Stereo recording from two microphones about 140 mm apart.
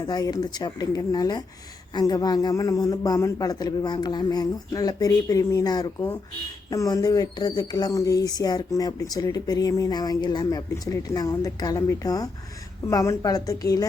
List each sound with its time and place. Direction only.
0.0 s speech: 25° left (ahead or behind)